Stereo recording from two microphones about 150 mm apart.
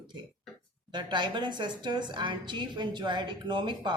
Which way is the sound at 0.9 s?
30° right (ahead or behind).